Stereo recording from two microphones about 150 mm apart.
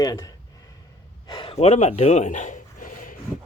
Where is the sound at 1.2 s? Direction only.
30° left (ahead or behind); by 3.2 s 65° left (ahead or behind).